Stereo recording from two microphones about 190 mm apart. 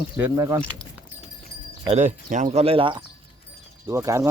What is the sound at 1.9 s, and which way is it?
Speech, 40° right (ahead or behind).